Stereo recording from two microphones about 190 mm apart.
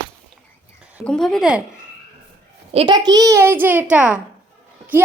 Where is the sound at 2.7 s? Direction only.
30° right (ahead or behind); by 4.2 s 5° right (ahead or behind).